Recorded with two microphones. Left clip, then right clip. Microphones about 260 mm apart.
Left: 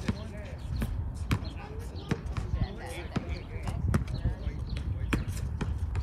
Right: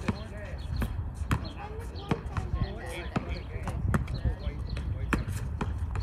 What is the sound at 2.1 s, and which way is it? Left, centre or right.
Basketball bounce, right.